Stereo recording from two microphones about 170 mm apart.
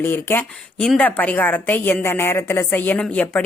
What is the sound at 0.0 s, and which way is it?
A woman's voice, 10° left (ahead or behind).